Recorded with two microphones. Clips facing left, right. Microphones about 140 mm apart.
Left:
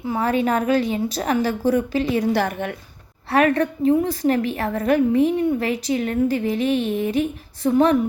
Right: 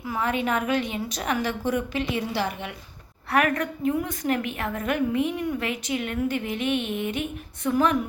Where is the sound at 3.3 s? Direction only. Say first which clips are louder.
Left 6 dB; 30° left (ahead or behind).